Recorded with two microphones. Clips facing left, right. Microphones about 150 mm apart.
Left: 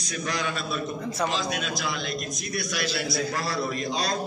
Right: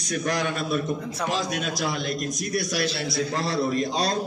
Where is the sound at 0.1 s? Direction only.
55° right (ahead or behind).